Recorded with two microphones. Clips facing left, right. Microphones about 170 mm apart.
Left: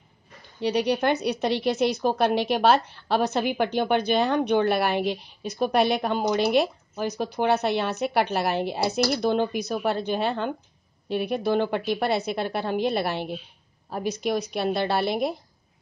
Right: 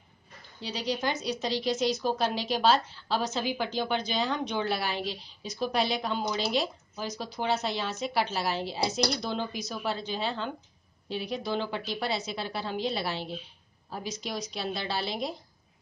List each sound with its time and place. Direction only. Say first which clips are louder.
0.6 s a woman's voice: left 9 dB; 65° left (ahead or behind)